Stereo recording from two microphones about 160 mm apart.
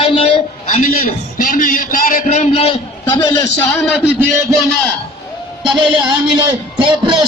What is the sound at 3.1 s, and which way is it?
Speech, 25° left (ahead or behind).